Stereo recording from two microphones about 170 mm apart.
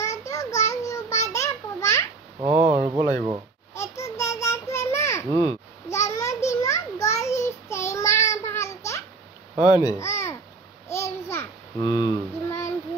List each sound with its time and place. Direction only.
0.0 s child singing: 20° left (ahead or behind)
1.3 s a sound: 15° left (ahead or behind)
2.4 s a child's voice: 40° right (ahead or behind)
2.7 s speech: 25° right (ahead or behind)
3.7 s a sound: 15° left (ahead or behind)
5.3 s a child's voice: 30° right (ahead or behind)
5.9 s a sound: 20° left (ahead or behind)
9.7 s speech: 20° left (ahead or behind)
10.9 s child singing: 15° left (ahead or behind)